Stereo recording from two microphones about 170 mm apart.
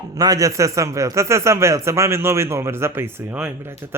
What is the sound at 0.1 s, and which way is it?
A man's voice, 20° right (ahead or behind).